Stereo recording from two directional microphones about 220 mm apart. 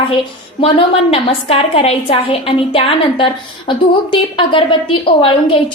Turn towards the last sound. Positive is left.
turn(degrees=25)  # may be behind; listen again after turning